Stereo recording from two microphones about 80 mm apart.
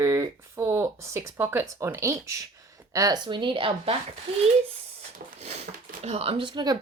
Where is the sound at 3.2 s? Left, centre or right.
Right.